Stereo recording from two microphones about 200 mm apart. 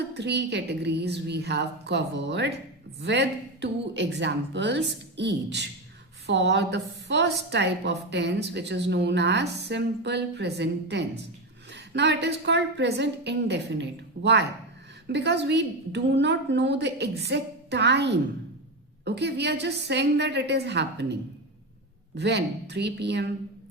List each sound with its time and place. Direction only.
0.1 s a woman's voice: 60° right (ahead or behind)